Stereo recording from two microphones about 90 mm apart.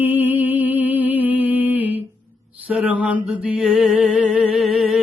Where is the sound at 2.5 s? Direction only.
15° right (ahead or behind).